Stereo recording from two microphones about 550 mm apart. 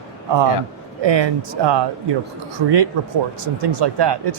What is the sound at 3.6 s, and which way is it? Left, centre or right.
Speech, right.